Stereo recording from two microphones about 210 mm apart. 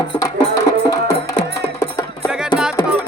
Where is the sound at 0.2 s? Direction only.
15° left (ahead or behind).